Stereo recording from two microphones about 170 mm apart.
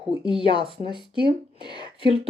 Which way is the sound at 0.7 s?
30° left (ahead or behind).